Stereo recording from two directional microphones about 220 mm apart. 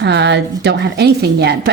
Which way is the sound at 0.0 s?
50° right (ahead or behind).